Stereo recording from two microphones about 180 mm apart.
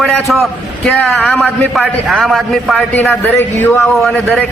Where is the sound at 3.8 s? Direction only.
Centre (ahead or behind).